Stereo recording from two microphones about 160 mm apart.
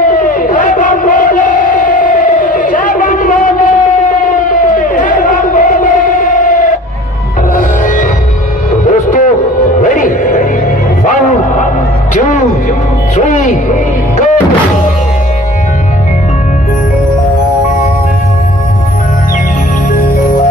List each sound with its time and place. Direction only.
0.2 s crowd: 55° left (ahead or behind)
4.7 s crowd: 55° left (ahead or behind)
7.5 s music: 55° left (ahead or behind)
8.8 s a sound: 50° left (ahead or behind)
9.8 s music: 55° left (ahead or behind)
11.1 s a sound: 50° left (ahead or behind)
13.1 s music: 50° left (ahead or behind)